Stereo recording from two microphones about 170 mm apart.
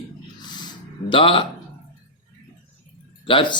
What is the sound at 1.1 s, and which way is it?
Speech, 30° left (ahead or behind).